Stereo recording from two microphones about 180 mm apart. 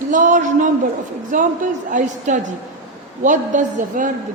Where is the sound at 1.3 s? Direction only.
45° right (ahead or behind).